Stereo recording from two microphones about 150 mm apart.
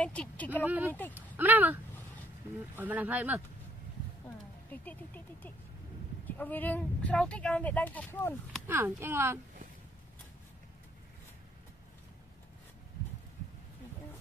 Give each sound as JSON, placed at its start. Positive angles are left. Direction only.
{"t": 0.0, "sound": "speech", "side_deg": 10}
{"t": 0.7, "sound": "speech", "side_deg": -10}
{"t": 4.6, "sound": "speech", "side_deg": 10}
{"t": 8.6, "sound": "speech", "side_deg": -15}